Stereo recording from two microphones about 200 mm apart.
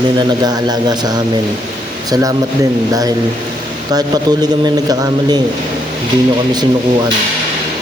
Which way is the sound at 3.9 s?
20° right (ahead or behind).